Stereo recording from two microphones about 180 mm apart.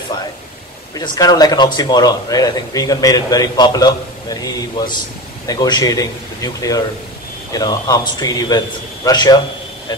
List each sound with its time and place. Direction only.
0.9 s speech: 20° left (ahead or behind)